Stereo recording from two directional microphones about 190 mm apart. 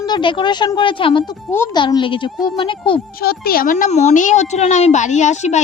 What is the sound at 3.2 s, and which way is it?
Speech, 50° left (ahead or behind).